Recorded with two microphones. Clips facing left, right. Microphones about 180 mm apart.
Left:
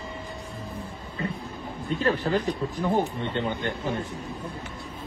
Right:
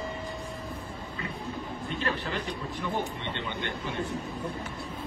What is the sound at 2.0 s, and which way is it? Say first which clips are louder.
Speech: left 9 dB; 40° left (ahead or behind).